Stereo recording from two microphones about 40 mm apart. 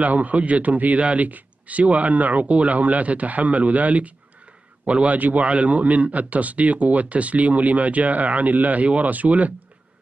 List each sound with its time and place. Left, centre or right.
0.0 s a man's voice: right